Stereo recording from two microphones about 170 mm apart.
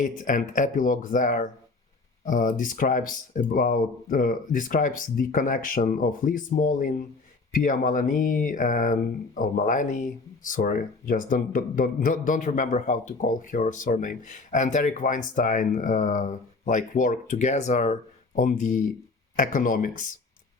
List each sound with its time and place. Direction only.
0.0 s speech: 50° left (ahead or behind)